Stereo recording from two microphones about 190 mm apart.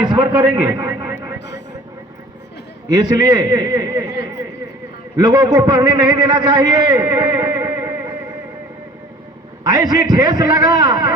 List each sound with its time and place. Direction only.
0.3 s a man's voice: 10° right (ahead or behind)
2.9 s a man's voice: 20° right (ahead or behind)
5.1 s a man's voice: 20° right (ahead or behind)
9.6 s a man's voice: 20° right (ahead or behind)